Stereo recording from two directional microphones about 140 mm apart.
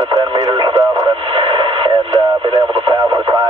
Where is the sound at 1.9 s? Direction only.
35° right (ahead or behind).